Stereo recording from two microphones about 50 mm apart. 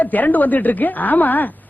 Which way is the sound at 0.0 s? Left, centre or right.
Left.